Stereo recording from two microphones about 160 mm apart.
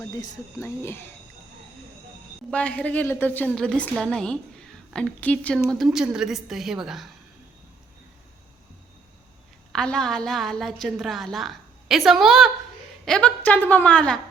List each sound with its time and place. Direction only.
0.6 s a woman's voice: 15° left (ahead or behind)
2.5 s a woman's voice: 10° left (ahead or behind)
5.5 s a woman's voice: centre (ahead or behind)
9.7 s a woman's voice: 5° left (ahead or behind)